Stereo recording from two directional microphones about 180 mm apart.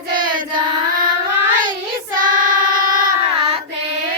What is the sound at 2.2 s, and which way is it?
Child singing, 50° right (ahead or behind).